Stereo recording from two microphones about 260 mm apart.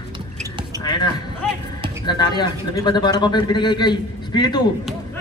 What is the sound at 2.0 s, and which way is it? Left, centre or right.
Speech, centre.